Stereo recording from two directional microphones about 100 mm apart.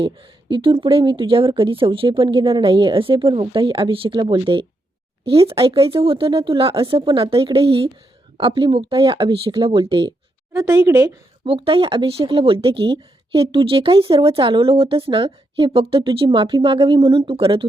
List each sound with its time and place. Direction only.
0.0 s a woman's voice: 60° right (ahead or behind)
5.3 s a woman's voice: 70° right (ahead or behind)
10.8 s speech: 25° right (ahead or behind)
11.4 s a woman's voice: 65° right (ahead or behind)